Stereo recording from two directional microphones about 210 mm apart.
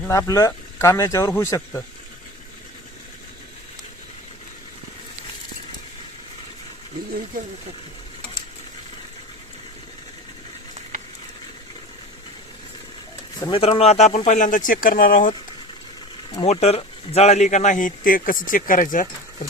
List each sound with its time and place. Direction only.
0.0 s speech: 15° left (ahead or behind)
13.4 s speech: 25° left (ahead or behind); by 15.3 s 40° left (ahead or behind)
16.3 s speech: 30° left (ahead or behind)